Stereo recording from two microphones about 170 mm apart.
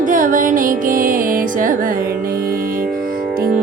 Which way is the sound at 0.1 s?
55° right (ahead or behind).